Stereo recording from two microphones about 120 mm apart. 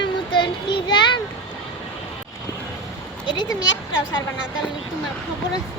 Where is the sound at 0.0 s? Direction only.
40° left (ahead or behind).